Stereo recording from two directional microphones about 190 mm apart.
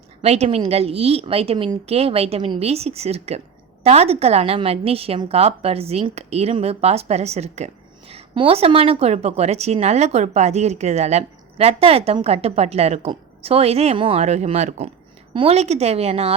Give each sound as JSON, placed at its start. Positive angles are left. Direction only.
{"t": 0.2, "sound": "a woman's voice", "side_deg": -35}